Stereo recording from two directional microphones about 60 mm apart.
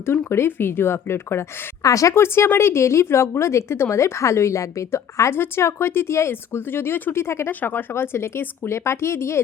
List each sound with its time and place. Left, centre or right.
0.0 s speech: left
1.8 s speech: left
2.1 s speech: left
5.3 s speech: left